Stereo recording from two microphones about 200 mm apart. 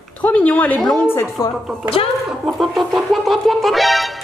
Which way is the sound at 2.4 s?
Centre (ahead or behind).